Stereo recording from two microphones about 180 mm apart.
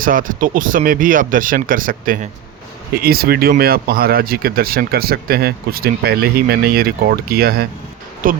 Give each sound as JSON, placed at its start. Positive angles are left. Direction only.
{"t": 0.0, "sound": "speech", "side_deg": -50}